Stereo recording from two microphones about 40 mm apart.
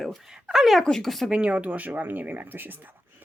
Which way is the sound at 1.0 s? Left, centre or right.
Centre.